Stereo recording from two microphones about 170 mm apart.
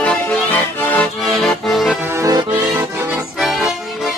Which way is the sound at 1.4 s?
Centre (ahead or behind).